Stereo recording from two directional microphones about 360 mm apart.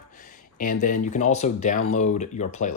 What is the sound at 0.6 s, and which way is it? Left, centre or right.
Speech, left.